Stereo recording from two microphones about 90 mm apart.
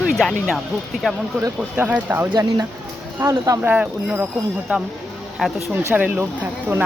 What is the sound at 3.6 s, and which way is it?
Speech, 20° right (ahead or behind).